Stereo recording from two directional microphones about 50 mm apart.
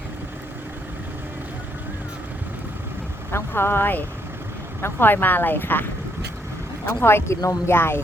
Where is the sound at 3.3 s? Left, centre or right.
Left.